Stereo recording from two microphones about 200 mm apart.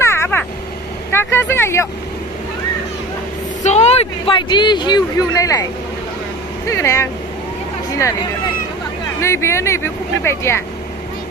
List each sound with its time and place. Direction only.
0.0 s vehicle: 15° left (ahead or behind)
1.1 s speech: 10° left (ahead or behind)
3.6 s speech: 35° left (ahead or behind); by 5.6 s 15° left (ahead or behind)
6.7 s speech: 15° left (ahead or behind)
9.2 s speech: 15° left (ahead or behind)